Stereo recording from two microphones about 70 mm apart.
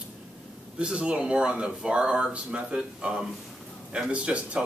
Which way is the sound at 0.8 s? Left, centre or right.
Centre.